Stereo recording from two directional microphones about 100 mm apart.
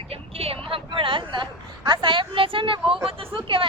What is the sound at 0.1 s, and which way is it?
Vehicle, 80° right.